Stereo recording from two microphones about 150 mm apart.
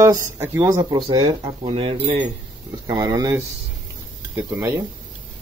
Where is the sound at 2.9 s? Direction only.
25° right (ahead or behind).